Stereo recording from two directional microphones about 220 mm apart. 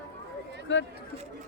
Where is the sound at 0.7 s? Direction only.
55° left (ahead or behind).